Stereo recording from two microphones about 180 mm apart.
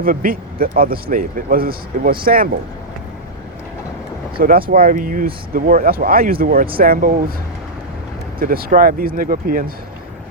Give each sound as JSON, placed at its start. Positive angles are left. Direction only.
{"t": 0.0, "sound": "a man's voice", "side_deg": -50}
{"t": 4.4, "sound": "a man's voice", "side_deg": -55}
{"t": 8.4, "sound": "a man's voice", "side_deg": -55}